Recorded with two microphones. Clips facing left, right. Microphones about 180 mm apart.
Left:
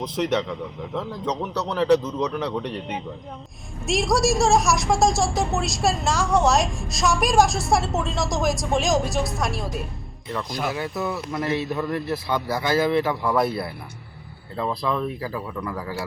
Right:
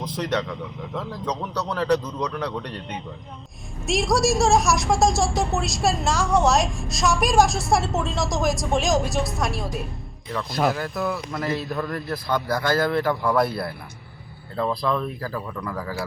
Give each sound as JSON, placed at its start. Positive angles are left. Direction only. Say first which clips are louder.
{"t": 0.2, "sound": "a woman's voice", "louder": "left 3 dB", "side_deg": 5}
{"t": 1.3, "sound": "speech", "louder": "left 1 dB", "side_deg": 25}
{"t": 1.7, "sound": "a woman's voice", "louder": "left 4 dB", "side_deg": 0}